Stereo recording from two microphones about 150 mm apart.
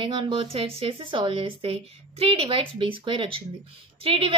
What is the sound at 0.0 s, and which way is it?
A woman's voice, 35° right (ahead or behind).